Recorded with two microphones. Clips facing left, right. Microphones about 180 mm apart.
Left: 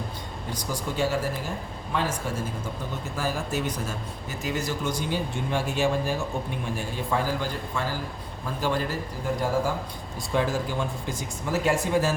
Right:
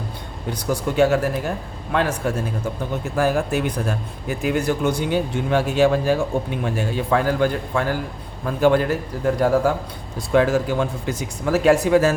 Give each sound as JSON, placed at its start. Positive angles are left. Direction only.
{"t": 0.7, "sound": "speech", "side_deg": -65}
{"t": 10.3, "sound": "speech", "side_deg": -80}